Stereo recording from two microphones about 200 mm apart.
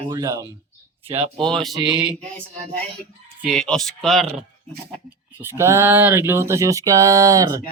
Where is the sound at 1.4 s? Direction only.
5° left (ahead or behind).